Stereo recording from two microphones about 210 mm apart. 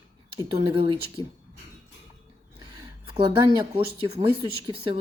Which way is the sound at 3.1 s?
25° right (ahead or behind).